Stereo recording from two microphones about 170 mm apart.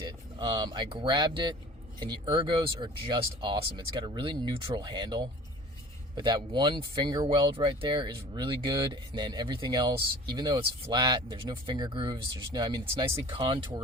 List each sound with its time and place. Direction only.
0.0 s speech: 25° right (ahead or behind)